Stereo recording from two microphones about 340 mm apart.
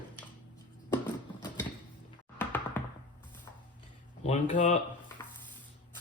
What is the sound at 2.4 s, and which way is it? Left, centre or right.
Music, centre.